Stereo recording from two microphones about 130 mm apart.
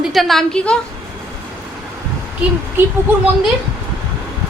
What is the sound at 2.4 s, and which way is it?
Speech, 10° right (ahead or behind).